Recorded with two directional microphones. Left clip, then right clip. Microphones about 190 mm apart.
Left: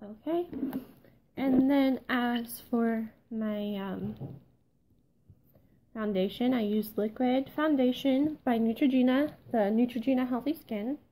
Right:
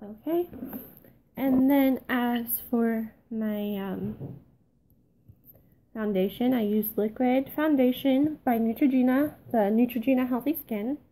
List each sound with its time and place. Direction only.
0.0 s a sound: 5° left (ahead or behind)
5.9 s speech: 5° left (ahead or behind)
8.5 s speech: 20° left (ahead or behind)
9.5 s speech: centre (ahead or behind)